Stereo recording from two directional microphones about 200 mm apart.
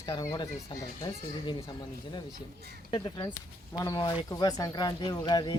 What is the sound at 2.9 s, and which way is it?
Speech, 25° left (ahead or behind).